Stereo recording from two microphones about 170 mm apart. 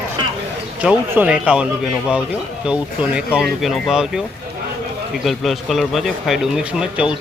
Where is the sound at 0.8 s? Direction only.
10° right (ahead or behind).